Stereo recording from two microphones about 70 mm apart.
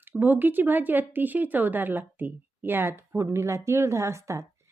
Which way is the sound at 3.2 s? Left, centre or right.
Right.